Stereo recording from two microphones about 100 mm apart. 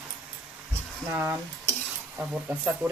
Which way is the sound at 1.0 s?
25° right (ahead or behind).